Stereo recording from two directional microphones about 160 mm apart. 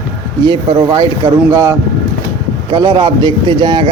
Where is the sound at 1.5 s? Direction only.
20° right (ahead or behind).